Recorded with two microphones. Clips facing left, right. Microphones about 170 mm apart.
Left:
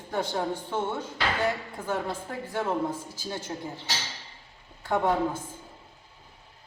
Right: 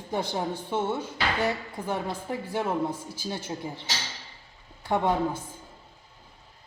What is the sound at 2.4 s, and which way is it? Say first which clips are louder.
Speech: even; 15° right (ahead or behind).